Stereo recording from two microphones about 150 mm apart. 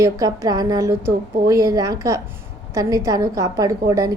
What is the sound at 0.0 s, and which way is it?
A woman's voice, 20° right (ahead or behind).